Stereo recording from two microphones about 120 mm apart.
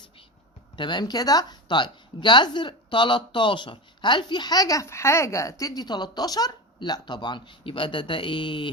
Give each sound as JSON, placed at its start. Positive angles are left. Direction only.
{"t": 0.8, "sound": "a woman's voice", "side_deg": 40}